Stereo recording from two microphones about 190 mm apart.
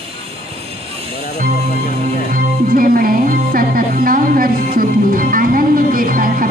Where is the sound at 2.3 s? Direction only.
50° right (ahead or behind).